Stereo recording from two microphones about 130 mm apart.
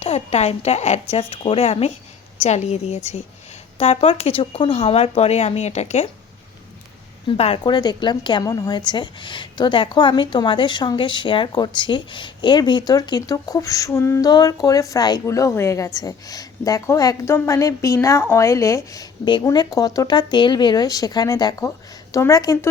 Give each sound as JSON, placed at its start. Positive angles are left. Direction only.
{"t": 0.0, "sound": "a woman's voice", "side_deg": 55}
{"t": 7.3, "sound": "speech", "side_deg": 50}
{"t": 7.6, "sound": "a woman's voice", "side_deg": 35}